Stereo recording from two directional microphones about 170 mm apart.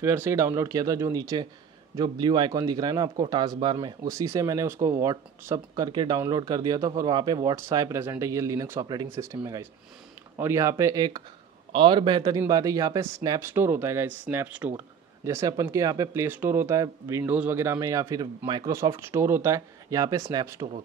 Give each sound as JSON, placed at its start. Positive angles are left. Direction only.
{"t": 0.0, "sound": "speech", "side_deg": -15}